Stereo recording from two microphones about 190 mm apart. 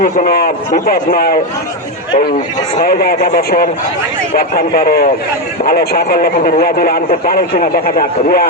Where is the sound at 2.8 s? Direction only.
55° left (ahead or behind).